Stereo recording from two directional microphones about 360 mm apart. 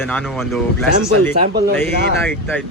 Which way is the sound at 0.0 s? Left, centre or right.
Centre.